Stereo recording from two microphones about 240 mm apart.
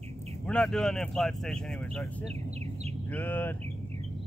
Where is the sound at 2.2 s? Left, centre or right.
Right.